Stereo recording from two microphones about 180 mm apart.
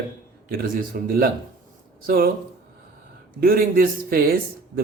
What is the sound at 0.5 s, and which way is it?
A man's voice, 55° right (ahead or behind).